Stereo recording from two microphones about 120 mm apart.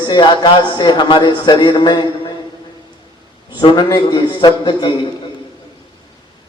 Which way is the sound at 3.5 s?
40° left (ahead or behind).